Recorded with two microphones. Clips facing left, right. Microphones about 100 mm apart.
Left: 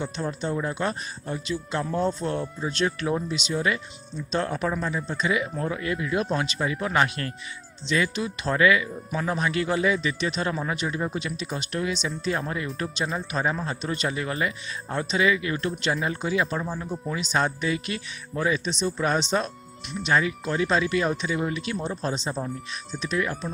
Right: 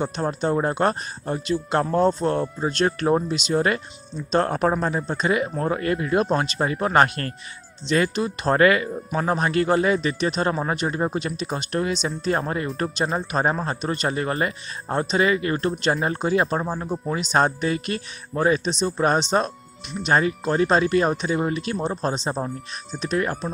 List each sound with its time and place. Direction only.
0.0 s speech: 45° right (ahead or behind)
17.1 s speech: 45° right (ahead or behind)